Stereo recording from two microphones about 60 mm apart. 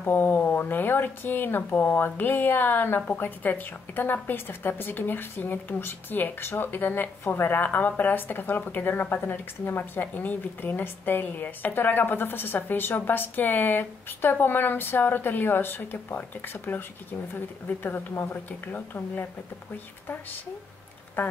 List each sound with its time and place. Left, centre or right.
0.0 s a woman's voice: left
21.2 s a woman's voice: left